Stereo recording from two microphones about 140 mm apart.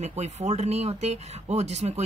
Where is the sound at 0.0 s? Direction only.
50° right (ahead or behind).